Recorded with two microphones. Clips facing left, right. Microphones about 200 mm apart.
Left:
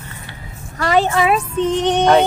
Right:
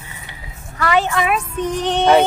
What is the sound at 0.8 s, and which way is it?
Speech, 35° left (ahead or behind).